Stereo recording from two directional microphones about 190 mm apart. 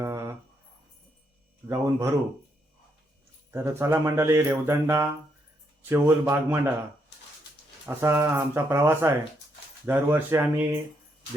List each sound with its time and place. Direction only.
0.0 s a sound: 15° right (ahead or behind)
1.6 s speech: 15° right (ahead or behind)
3.5 s speech: 15° right (ahead or behind)
7.9 s speech: 15° right (ahead or behind)